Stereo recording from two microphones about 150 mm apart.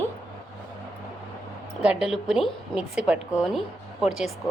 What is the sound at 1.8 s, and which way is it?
A woman's voice, 5° right (ahead or behind).